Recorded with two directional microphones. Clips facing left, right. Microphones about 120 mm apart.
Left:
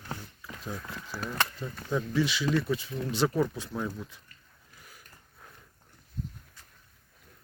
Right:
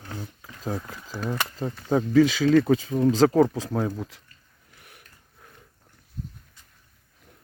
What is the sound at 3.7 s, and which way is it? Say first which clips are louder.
Speech: right 7 dB; 45° right (ahead or behind).